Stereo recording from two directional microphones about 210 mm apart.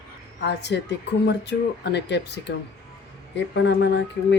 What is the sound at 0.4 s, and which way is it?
Speech, 55° left (ahead or behind).